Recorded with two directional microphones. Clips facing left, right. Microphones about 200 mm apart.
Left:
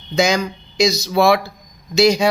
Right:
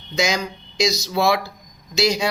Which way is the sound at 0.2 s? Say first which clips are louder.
Left 5 dB; 55° left (ahead or behind).